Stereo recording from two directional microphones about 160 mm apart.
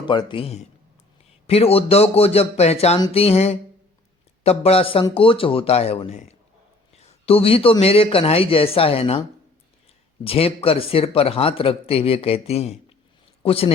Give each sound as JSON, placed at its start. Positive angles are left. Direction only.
{"t": 0.0, "sound": "a man's voice", "side_deg": 30}
{"t": 10.2, "sound": "a man's voice", "side_deg": 35}